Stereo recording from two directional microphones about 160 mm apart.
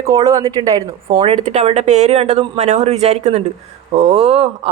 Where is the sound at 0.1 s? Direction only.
25° right (ahead or behind).